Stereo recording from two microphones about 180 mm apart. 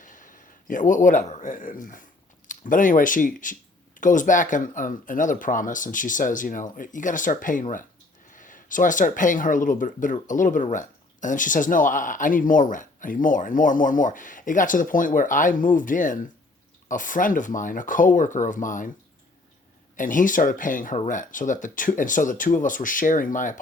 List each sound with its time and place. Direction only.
0.0 s speech: 45° left (ahead or behind)
20.0 s speech: 45° left (ahead or behind)